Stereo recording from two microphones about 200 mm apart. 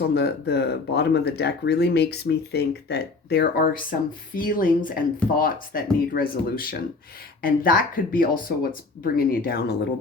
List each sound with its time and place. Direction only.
0.1 s speech: 55° left (ahead or behind)